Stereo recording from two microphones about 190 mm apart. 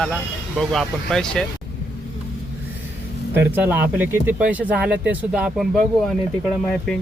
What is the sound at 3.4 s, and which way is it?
Speech, 10° right (ahead or behind).